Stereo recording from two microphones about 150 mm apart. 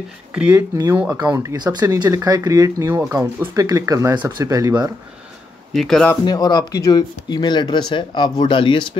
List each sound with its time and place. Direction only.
0.3 s speech: 10° right (ahead or behind)
5.7 s speech: centre (ahead or behind)
6.2 s speech: 25° left (ahead or behind)